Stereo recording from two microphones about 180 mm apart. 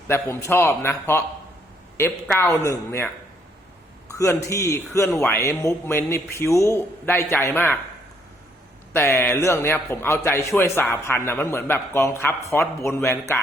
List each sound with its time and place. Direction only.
0.1 s a man's voice: 15° left (ahead or behind)
4.1 s a man's voice: 15° left (ahead or behind)
8.9 s a man's voice: 15° left (ahead or behind)